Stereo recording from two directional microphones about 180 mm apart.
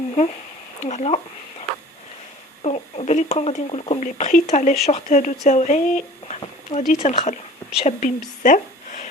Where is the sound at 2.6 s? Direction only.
35° left (ahead or behind).